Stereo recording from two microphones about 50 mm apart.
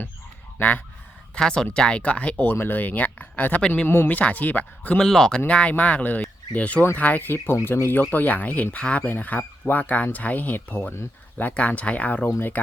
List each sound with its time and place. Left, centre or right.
1.4 s speech: centre
2.4 s speech: left
3.8 s speech: left
4.1 s speech: left
4.9 s speech: centre
5.5 s speech: left
8.1 s speech: left
9.0 s speech: left